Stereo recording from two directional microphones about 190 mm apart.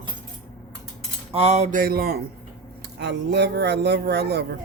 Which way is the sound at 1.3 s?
35° right (ahead or behind).